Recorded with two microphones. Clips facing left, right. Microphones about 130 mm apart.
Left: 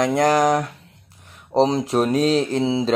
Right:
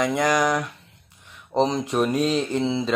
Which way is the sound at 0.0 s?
35° left (ahead or behind).